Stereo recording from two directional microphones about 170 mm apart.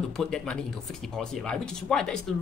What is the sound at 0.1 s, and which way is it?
Speech, 5° left (ahead or behind).